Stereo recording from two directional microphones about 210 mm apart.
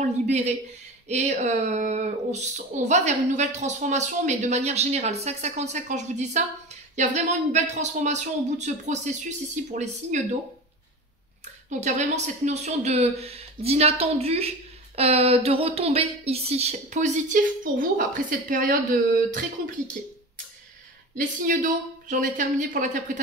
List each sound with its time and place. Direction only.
0.0 s speech: 35° right (ahead or behind)
11.8 s speech: 30° right (ahead or behind)
21.2 s speech: 40° right (ahead or behind)